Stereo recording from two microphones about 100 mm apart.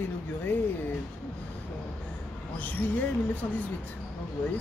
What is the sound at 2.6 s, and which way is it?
Speech, 15° left (ahead or behind).